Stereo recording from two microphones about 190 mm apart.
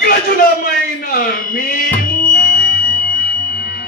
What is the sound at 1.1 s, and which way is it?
Music, 50° left (ahead or behind).